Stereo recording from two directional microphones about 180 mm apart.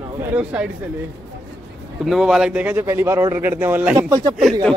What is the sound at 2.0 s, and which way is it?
A man's voice, centre (ahead or behind).